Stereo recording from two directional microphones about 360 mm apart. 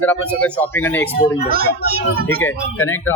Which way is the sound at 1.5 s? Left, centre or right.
Right.